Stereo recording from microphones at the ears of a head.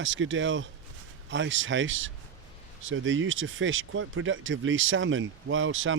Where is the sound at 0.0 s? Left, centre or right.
Right.